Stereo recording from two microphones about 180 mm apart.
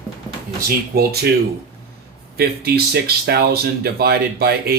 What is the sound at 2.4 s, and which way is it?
Speech, 60° right (ahead or behind).